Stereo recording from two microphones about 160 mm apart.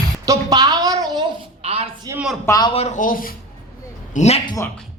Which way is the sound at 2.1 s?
20° right (ahead or behind).